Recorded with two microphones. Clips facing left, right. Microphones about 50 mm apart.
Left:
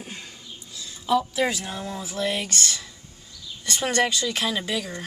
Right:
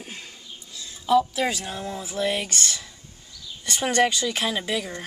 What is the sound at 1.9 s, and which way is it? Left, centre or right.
Speech, centre.